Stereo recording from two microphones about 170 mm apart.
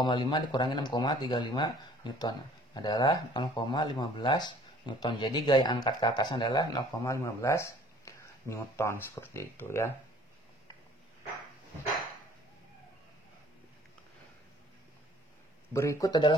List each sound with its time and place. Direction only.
0.0 s speech: 25° left (ahead or behind)
15.7 s speech: 15° left (ahead or behind)